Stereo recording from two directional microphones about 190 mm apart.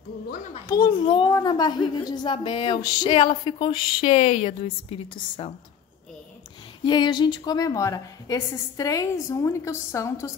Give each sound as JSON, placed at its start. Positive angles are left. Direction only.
{"t": 0.7, "sound": "speech", "side_deg": 20}
{"t": 6.8, "sound": "a woman's voice", "side_deg": 25}